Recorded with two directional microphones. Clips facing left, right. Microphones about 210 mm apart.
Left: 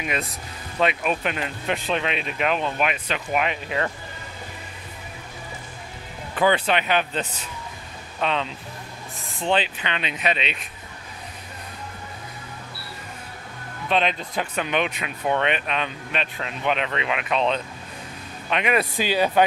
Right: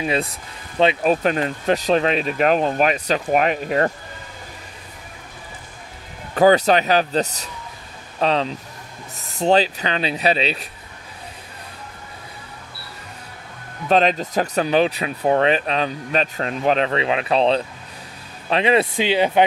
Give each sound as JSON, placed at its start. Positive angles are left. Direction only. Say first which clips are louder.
{"t": 0.0, "sound": "speech", "louder": "right 6 dB", "side_deg": -30}
{"t": 6.3, "sound": "speech", "louder": "right 7 dB", "side_deg": -40}
{"t": 13.8, "sound": "speech", "louder": "right 6 dB", "side_deg": -40}